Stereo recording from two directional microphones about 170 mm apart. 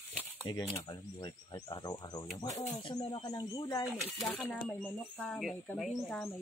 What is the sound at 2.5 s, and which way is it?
Speech, 40° left (ahead or behind).